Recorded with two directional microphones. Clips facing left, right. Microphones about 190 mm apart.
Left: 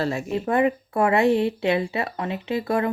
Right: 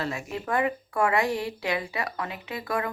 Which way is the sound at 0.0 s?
30° left (ahead or behind).